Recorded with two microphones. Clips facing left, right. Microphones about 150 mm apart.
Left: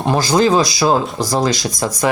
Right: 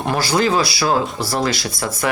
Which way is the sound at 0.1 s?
20° left (ahead or behind).